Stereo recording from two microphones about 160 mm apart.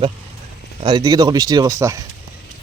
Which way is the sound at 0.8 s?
30° right (ahead or behind).